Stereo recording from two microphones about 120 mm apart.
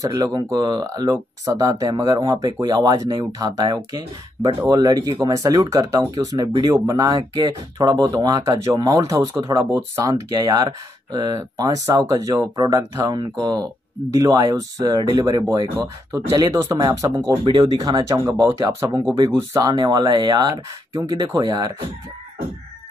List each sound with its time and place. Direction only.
0.0 s speech: 30° right (ahead or behind)
18.2 s speech: 20° right (ahead or behind)
19.6 s speech: 35° right (ahead or behind)